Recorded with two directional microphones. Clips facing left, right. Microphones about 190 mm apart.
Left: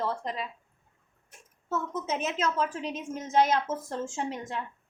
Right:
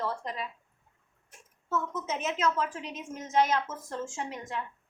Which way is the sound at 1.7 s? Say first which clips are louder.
Left 1 dB; 30° left (ahead or behind).